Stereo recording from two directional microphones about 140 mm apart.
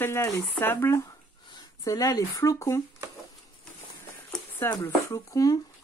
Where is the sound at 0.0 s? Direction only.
20° left (ahead or behind).